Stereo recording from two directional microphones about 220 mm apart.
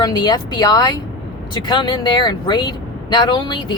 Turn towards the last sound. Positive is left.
turn(degrees=20)  # may be behind; listen again after turning